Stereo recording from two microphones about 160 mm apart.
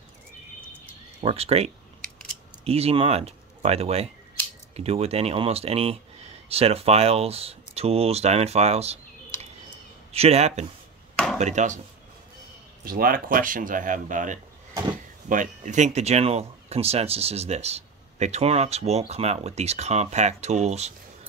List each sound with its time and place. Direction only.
1.2 s speech: 40° right (ahead or behind)
12.8 s speech: 65° right (ahead or behind); by 20.9 s 45° right (ahead or behind)